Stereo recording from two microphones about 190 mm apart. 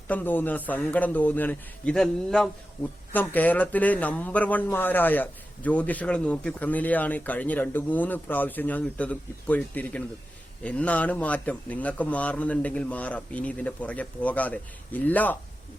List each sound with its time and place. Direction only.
0.1 s speech: 10° left (ahead or behind)